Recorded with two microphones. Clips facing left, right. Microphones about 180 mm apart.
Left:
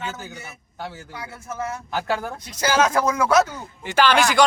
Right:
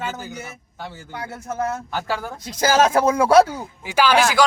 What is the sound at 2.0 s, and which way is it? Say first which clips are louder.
Speech: left 4 dB; centre (ahead or behind).